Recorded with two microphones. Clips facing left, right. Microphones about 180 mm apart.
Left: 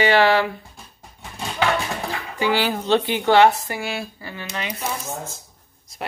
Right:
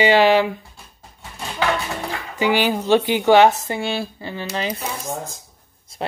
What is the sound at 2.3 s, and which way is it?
Speech, 20° right (ahead or behind).